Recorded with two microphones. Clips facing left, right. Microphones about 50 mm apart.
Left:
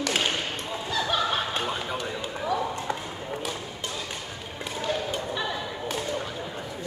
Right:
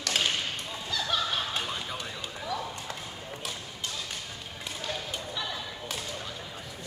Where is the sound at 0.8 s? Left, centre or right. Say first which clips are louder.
Left 4 dB; left.